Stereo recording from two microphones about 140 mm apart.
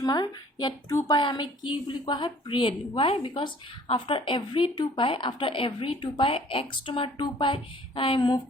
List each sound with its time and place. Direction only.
0.0 s a woman's voice: 30° left (ahead or behind)